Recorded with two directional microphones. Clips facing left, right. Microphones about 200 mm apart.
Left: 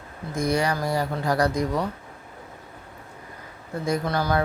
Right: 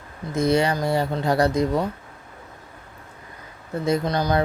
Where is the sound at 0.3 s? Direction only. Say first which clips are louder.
Right 4 dB; 25° right (ahead or behind).